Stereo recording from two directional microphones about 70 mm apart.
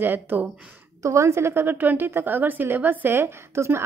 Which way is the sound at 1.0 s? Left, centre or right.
Right.